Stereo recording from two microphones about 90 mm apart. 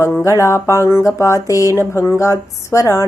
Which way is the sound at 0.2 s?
35° left (ahead or behind).